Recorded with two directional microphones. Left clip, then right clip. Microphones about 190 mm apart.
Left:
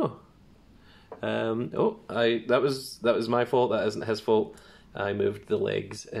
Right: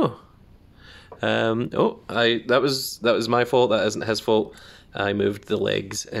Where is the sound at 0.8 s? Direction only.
55° right (ahead or behind).